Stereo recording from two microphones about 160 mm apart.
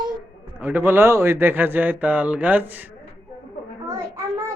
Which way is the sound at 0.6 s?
10° right (ahead or behind).